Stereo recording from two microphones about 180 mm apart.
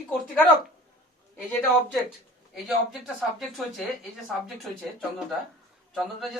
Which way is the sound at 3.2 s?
Centre (ahead or behind).